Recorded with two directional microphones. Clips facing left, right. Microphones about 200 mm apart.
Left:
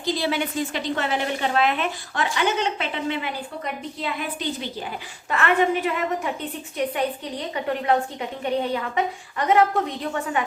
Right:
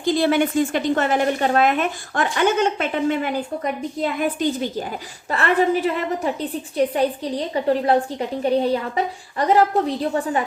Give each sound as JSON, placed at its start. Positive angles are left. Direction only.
{"t": 0.0, "sound": "a woman's voice", "side_deg": -50}
{"t": 5.3, "sound": "a woman's voice", "side_deg": -35}